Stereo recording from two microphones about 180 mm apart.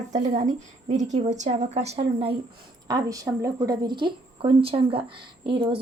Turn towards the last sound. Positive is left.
turn(degrees=-30)  # may be behind; listen again after turning